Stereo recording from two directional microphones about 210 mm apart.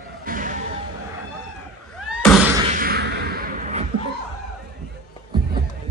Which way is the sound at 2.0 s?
Centre (ahead or behind).